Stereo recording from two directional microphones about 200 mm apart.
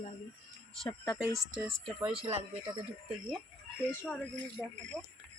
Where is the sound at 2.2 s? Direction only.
30° right (ahead or behind).